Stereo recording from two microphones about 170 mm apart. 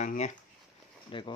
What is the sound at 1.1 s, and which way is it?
Speech, 30° left (ahead or behind).